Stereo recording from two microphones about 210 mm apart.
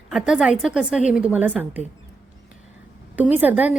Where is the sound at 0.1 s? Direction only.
5° right (ahead or behind).